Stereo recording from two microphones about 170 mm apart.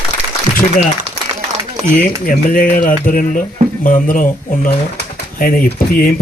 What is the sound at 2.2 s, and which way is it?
Speech, 55° left (ahead or behind).